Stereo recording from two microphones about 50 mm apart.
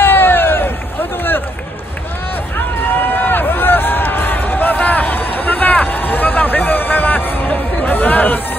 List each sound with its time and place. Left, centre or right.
0.0 s hubbub: left
2.5 s run: left